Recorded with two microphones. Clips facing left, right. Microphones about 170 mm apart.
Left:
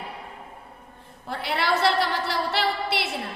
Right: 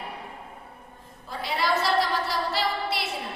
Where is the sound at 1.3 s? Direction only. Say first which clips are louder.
Left 1 dB; 65° left (ahead or behind).